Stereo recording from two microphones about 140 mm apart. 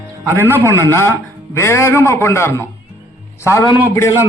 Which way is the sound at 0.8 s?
20° left (ahead or behind).